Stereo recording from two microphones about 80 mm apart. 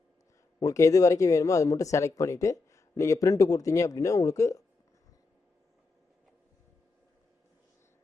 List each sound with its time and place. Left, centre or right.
0.6 s speech: left